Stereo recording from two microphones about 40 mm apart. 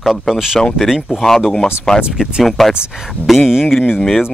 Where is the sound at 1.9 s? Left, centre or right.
Centre.